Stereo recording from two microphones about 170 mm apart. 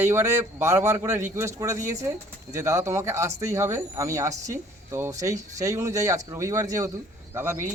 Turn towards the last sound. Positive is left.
turn(degrees=-15)  # may be behind; listen again after turning